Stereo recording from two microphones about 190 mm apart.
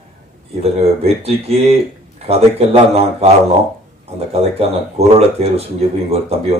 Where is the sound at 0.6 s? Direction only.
35° right (ahead or behind).